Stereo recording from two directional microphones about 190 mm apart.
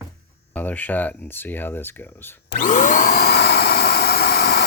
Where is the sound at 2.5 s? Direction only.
40° left (ahead or behind).